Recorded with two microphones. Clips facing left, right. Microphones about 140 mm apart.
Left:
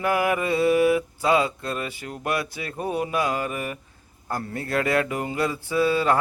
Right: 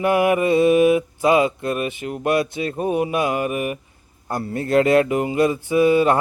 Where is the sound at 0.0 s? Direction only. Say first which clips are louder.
Right 6 dB; 20° right (ahead or behind).